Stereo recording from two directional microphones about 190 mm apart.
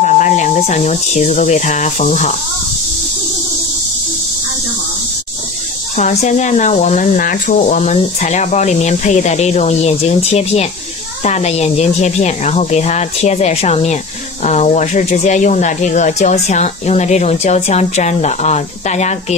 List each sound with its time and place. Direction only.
0.0 s speech: 40° left (ahead or behind)
5.9 s speech: 40° left (ahead or behind)